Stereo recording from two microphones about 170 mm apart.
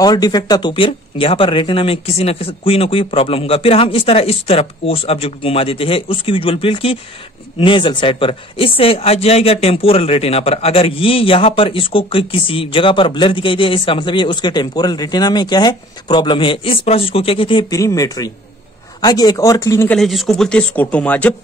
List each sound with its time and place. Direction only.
0.0 s speech: 25° left (ahead or behind)
19.9 s speech: centre (ahead or behind)